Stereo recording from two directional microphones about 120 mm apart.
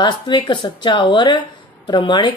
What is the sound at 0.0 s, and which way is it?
Speech, 40° left (ahead or behind).